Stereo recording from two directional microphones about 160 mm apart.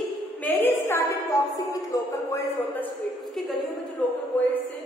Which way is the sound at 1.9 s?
20° left (ahead or behind).